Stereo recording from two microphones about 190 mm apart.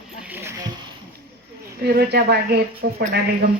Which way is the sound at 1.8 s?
55° right (ahead or behind).